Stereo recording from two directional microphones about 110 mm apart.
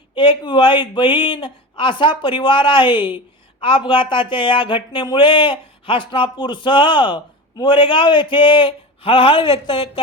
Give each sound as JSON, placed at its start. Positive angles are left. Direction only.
{"t": 0.2, "sound": "speech", "side_deg": 50}